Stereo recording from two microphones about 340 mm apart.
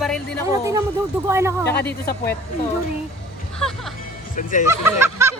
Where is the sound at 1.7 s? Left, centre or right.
Left.